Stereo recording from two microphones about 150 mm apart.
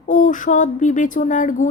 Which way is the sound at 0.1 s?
60° left (ahead or behind).